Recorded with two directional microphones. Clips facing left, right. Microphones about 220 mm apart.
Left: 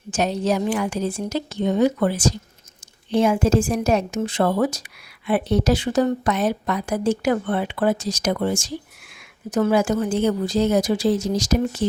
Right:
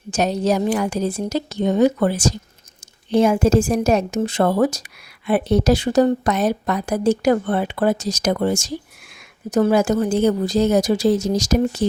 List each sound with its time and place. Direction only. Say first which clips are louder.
0.1 s a woman's voice: right 2 dB; 40° right (ahead or behind)